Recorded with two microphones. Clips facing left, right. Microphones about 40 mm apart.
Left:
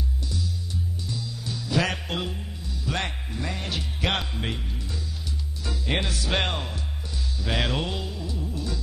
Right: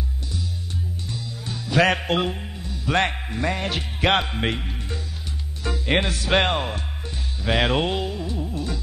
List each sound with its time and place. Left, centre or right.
1.0 s music: right
5.6 s speech: right
7.3 s music: right